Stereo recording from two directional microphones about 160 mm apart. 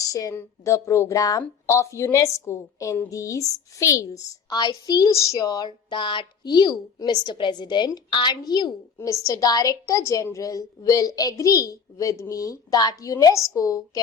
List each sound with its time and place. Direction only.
0.0 s speech: 20° left (ahead or behind)